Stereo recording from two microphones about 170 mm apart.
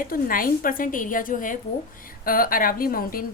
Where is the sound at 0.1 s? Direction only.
55° left (ahead or behind).